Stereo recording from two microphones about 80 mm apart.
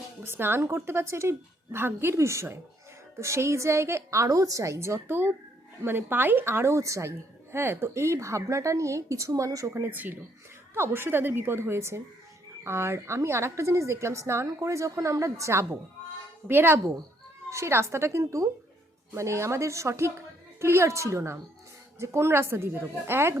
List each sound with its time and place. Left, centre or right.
0.2 s a woman's voice: right
7.5 s a woman's voice: right
9.9 s a woman's voice: right
16.5 s a woman's voice: right
17.5 s a woman's voice: right